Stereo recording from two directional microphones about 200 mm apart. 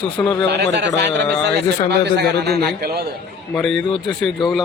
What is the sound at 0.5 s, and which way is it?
A man's voice, 60° right (ahead or behind).